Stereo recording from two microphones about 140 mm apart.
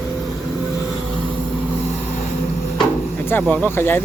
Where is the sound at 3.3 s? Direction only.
15° left (ahead or behind).